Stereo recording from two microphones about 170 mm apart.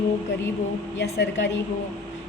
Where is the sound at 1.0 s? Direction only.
90° left.